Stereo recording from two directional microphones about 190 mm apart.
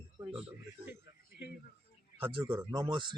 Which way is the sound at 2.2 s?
25° right (ahead or behind).